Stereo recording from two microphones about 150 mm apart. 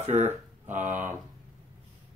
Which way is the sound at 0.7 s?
55° right (ahead or behind).